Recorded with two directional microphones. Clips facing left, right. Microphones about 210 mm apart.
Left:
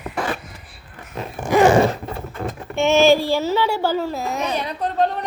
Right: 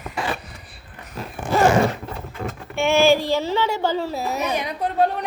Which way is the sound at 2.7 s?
20° left (ahead or behind).